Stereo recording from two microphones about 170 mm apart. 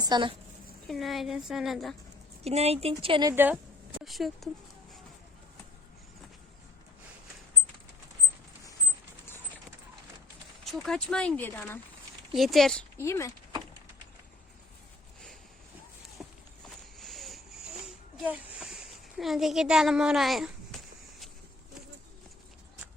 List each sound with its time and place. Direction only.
0.0 s a woman's voice: 25° right (ahead or behind)
0.9 s speech: centre (ahead or behind)
2.4 s speech: 40° right (ahead or behind)
3.3 s speech: 10° right (ahead or behind)
4.0 s a sound: centre (ahead or behind)
10.6 s speech: centre (ahead or behind)
12.3 s speech: centre (ahead or behind)
13.0 s speech: 15° left (ahead or behind)
16.2 s walk: 5° right (ahead or behind)
17.0 s a sound: centre (ahead or behind)